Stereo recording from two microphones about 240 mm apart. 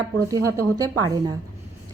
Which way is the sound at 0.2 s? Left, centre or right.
Centre.